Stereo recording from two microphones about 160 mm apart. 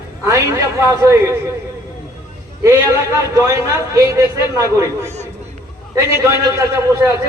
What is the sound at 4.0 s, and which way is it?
Speech, 20° right (ahead or behind).